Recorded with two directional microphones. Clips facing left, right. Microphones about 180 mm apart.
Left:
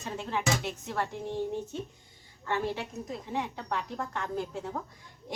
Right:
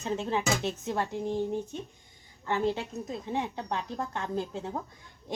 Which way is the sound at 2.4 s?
20° right (ahead or behind).